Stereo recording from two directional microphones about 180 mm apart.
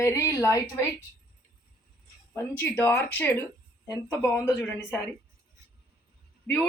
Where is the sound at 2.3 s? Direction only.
10° left (ahead or behind).